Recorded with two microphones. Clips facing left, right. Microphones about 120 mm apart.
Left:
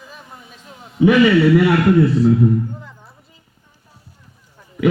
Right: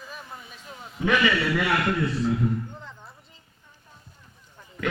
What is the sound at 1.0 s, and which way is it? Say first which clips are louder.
Speech: left 11 dB; 10° left (ahead or behind).